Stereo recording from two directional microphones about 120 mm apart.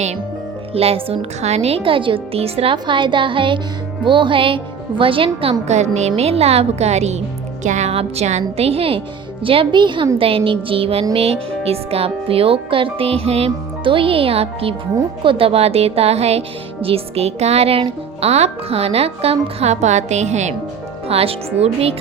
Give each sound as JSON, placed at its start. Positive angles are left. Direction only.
{"t": 0.7, "sound": "speech", "side_deg": -55}
{"t": 2.7, "sound": "speech", "side_deg": -40}
{"t": 7.6, "sound": "speech", "side_deg": -80}
{"t": 21.1, "sound": "speech", "side_deg": -55}